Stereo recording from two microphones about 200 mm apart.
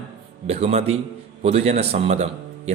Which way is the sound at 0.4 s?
30° right (ahead or behind).